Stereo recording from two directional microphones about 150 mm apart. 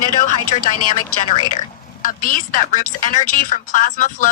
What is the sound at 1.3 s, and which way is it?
A woman's voice, 55° left (ahead or behind).